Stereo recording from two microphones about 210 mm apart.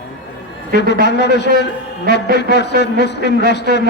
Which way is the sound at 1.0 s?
55° left (ahead or behind).